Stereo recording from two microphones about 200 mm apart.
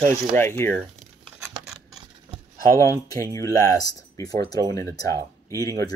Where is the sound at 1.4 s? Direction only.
Centre (ahead or behind).